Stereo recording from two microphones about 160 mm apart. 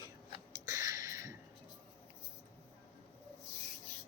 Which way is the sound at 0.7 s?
20° right (ahead or behind).